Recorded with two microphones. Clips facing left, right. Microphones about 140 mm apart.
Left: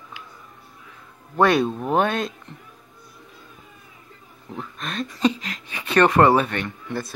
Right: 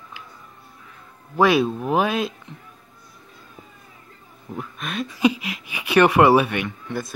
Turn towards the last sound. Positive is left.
turn(degrees=-5)  # may be behind; listen again after turning